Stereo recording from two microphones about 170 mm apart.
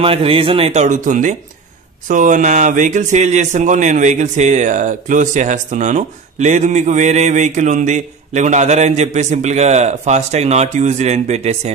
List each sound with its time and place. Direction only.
0.0 s speech: 35° right (ahead or behind)